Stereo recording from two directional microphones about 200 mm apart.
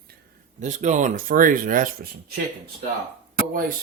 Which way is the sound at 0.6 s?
35° right (ahead or behind).